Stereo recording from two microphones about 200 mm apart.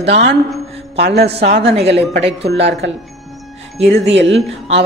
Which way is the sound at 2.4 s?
60° right (ahead or behind).